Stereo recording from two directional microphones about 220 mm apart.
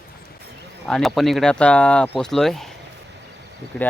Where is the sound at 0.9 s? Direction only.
Centre (ahead or behind).